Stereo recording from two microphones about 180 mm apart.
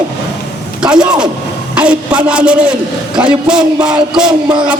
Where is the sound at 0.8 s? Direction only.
5° right (ahead or behind).